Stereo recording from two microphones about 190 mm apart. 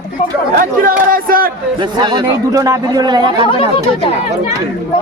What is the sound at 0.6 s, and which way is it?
Speech, 50° right (ahead or behind).